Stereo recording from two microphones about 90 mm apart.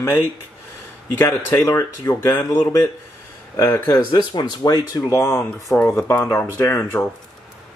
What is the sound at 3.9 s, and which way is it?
Speech, 50° left (ahead or behind).